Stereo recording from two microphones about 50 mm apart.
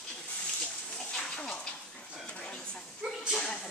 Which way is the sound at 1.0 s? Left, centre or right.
Centre.